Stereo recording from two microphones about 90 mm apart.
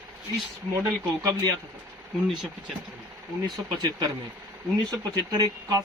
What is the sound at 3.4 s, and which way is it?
Speech, 50° right (ahead or behind).